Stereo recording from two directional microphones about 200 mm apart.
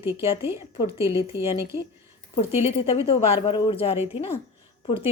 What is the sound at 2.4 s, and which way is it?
Speech, 30° left (ahead or behind).